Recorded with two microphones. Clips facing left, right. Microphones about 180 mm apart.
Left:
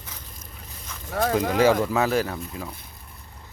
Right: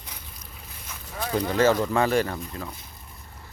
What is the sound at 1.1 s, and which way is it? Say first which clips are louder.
Speech: left 9 dB; 70° left (ahead or behind).